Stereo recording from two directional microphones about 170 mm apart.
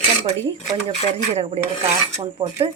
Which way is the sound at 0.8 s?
35° right (ahead or behind).